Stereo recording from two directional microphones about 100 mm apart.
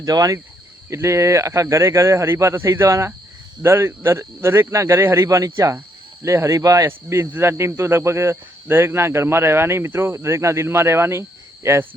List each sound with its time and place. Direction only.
0.0 s speech: 40° right (ahead or behind)